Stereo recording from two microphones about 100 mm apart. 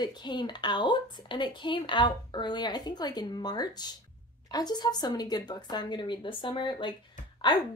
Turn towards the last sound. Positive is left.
turn(degrees=50)  # may be behind; listen again after turning